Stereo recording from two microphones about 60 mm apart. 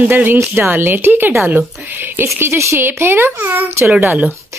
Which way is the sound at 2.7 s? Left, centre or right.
Right.